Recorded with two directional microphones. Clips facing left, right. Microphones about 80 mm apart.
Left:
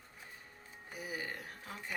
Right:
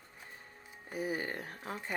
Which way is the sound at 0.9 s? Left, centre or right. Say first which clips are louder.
Right 6 dB; right.